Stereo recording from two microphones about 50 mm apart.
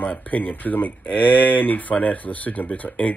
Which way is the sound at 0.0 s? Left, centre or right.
Left.